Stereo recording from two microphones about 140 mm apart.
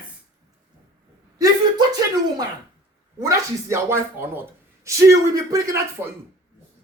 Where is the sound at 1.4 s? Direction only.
25° right (ahead or behind).